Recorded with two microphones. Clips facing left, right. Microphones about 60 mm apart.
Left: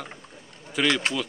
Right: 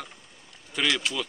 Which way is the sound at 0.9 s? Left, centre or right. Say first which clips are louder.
Left 3 dB; left.